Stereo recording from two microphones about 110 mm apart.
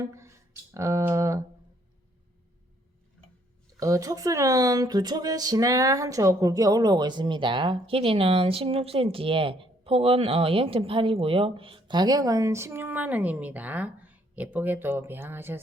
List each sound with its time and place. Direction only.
0.1 s speech: 25° right (ahead or behind)
3.8 s speech: 30° right (ahead or behind)